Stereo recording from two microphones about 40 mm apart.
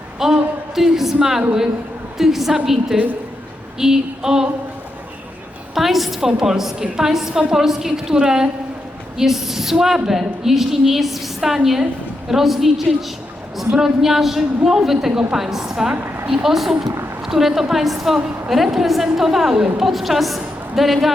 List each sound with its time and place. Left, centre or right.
0.2 s a woman's voice: centre
5.7 s a woman's voice: centre
15.7 s a woman's voice: right; by 21.1 s centre